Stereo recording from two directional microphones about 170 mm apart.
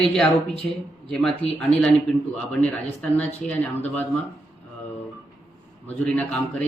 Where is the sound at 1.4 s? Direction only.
40° left (ahead or behind).